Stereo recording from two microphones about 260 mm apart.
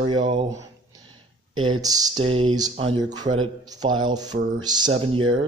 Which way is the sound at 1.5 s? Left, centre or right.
Right.